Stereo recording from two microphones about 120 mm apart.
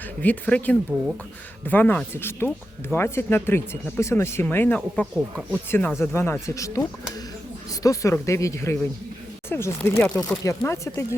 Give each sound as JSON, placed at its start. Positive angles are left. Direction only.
{"t": 0.2, "sound": "speech", "side_deg": 10}
{"t": 5.1, "sound": "speech", "side_deg": -5}
{"t": 6.0, "sound": "speech", "side_deg": 20}